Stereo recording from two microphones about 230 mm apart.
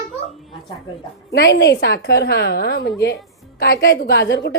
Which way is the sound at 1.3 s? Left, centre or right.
Left.